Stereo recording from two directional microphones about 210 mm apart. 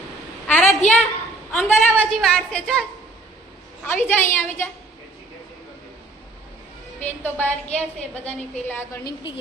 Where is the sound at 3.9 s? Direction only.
10° left (ahead or behind).